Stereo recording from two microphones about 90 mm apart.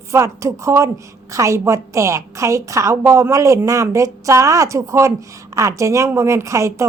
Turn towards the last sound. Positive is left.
turn(degrees=-35)  # may be behind; listen again after turning